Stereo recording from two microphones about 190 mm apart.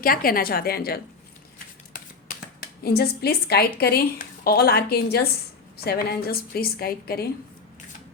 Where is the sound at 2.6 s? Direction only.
55° left (ahead or behind).